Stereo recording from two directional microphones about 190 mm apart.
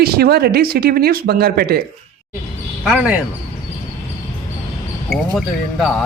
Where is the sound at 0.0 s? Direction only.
55° right (ahead or behind).